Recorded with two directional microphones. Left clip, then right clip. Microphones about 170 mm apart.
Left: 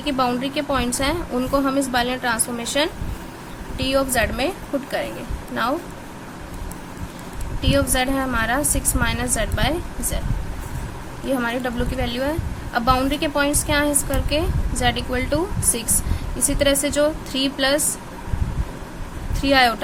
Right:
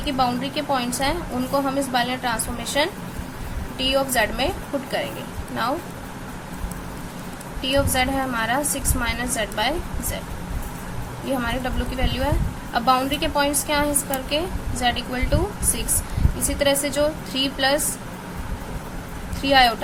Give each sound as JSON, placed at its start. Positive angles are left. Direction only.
{"t": 0.0, "sound": "a woman's voice", "side_deg": 30}
{"t": 7.6, "sound": "a woman's voice", "side_deg": 25}
{"t": 11.3, "sound": "a woman's voice", "side_deg": 25}
{"t": 19.4, "sound": "a woman's voice", "side_deg": 25}